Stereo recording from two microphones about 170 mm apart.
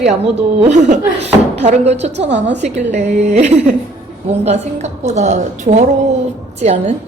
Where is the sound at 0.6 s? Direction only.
45° right (ahead or behind).